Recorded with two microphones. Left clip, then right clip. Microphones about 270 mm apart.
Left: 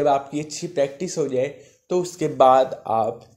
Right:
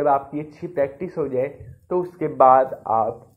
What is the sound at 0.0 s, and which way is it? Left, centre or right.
Speech, left.